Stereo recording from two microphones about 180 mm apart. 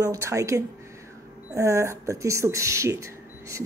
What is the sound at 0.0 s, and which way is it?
Speech, 15° right (ahead or behind).